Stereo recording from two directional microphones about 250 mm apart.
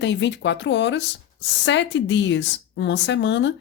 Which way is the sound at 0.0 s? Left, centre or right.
Left.